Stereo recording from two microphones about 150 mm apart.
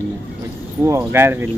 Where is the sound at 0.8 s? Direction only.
20° right (ahead or behind).